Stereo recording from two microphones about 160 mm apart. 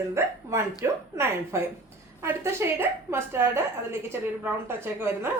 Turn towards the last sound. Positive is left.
turn(degrees=-15)  # may be behind; listen again after turning